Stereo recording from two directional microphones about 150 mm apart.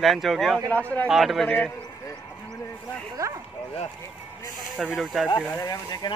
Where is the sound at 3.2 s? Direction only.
20° right (ahead or behind).